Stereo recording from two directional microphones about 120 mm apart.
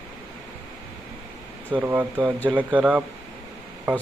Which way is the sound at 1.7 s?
15° right (ahead or behind).